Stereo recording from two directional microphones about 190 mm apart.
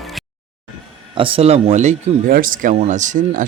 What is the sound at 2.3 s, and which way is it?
Speech, 50° right (ahead or behind).